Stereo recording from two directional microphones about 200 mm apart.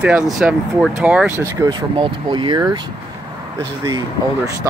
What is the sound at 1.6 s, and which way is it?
Speech, 20° right (ahead or behind).